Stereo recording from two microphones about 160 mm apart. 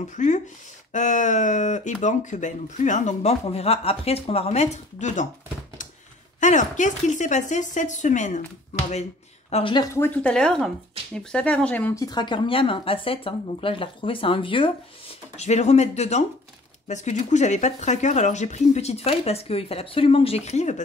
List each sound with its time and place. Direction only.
0.0 s speech: 50° left (ahead or behind)
6.4 s speech: 50° left (ahead or behind)
9.5 s speech: 35° left (ahead or behind)
9.9 s speech: 10° left (ahead or behind)
11.9 s speech: 25° left (ahead or behind)
15.3 s speech: 45° left (ahead or behind)